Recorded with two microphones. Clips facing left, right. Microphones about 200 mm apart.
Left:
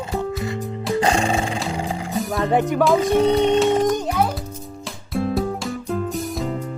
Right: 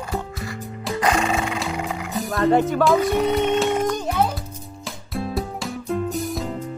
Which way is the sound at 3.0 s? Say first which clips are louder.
Left 3 dB; 30° left (ahead or behind).